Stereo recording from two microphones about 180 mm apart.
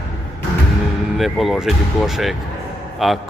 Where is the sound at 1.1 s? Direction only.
Centre (ahead or behind).